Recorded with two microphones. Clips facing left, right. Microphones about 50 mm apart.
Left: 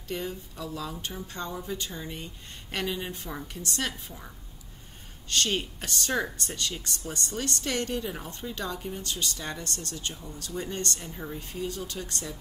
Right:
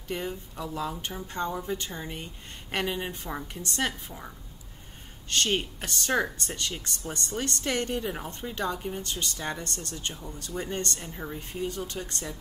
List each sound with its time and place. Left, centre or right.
0.1 s a woman's voice: centre
5.3 s a woman's voice: centre
11.0 s a woman's voice: centre